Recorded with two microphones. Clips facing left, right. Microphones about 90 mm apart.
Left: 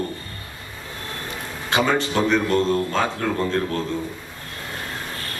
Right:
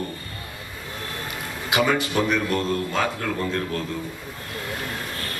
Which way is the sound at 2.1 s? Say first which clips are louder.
Left 3 dB; 25° left (ahead or behind).